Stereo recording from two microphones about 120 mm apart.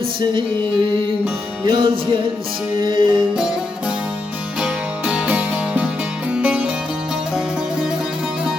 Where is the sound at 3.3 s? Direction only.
5° right (ahead or behind).